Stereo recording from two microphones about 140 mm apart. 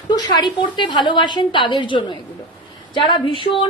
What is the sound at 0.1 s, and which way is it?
A woman's voice, 30° left (ahead or behind).